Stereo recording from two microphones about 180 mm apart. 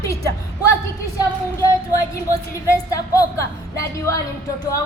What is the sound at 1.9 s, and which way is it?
A woman's voice, 20° left (ahead or behind).